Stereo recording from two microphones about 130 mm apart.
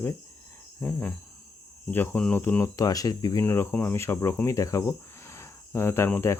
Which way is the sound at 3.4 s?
15° left (ahead or behind).